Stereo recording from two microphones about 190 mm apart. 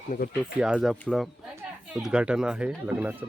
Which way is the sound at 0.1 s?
45° left (ahead or behind).